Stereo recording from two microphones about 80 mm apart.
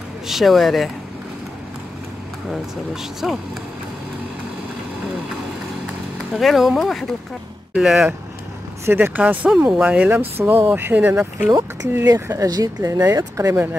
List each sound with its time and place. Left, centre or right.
0.3 s speech: centre
2.5 s speech: centre
6.3 s speech: centre
8.8 s speech: right
12.1 s speech: right
12.4 s speech: right
12.9 s speech: right